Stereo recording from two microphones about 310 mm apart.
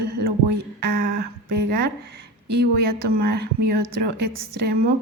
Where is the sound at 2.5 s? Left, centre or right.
Right.